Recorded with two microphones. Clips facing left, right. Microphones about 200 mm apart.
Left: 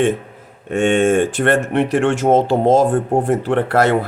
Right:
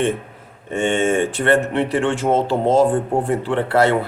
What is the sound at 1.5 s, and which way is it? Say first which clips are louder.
Speech: left 1 dB; 45° left (ahead or behind).